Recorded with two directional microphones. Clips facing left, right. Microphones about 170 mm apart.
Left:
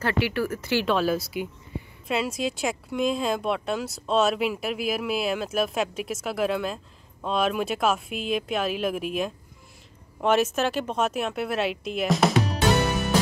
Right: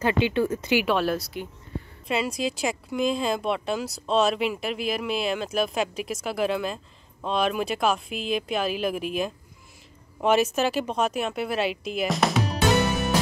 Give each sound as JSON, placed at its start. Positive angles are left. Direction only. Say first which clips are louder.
{"t": 0.0, "sound": "speech", "louder": "right 3 dB", "side_deg": -20}
{"t": 0.8, "sound": "speech", "louder": "left 1 dB", "side_deg": 0}